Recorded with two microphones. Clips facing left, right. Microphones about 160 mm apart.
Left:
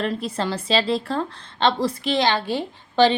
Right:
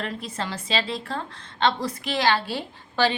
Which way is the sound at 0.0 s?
35° left (ahead or behind).